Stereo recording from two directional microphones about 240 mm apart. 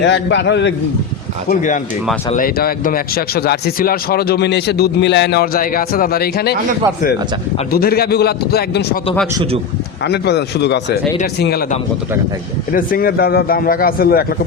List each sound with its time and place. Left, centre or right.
0.0 s a man's voice: left
1.5 s speech: left
7.7 s speech: left
9.3 s a man's voice: right
10.1 s a man's voice: left
12.7 s speech: left